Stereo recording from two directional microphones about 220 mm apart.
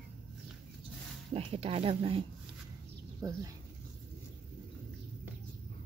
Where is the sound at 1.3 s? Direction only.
25° right (ahead or behind).